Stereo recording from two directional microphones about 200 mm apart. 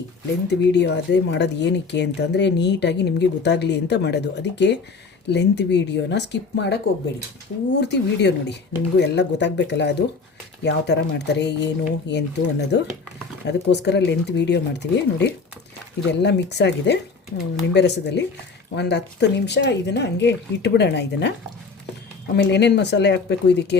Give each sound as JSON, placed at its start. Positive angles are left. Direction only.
{"t": 0.4, "sound": "speech", "side_deg": 60}
{"t": 7.8, "sound": "speech", "side_deg": 60}
{"t": 22.4, "sound": "speech", "side_deg": 60}